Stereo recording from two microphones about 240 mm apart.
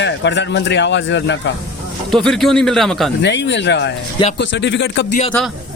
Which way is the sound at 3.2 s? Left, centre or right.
Left.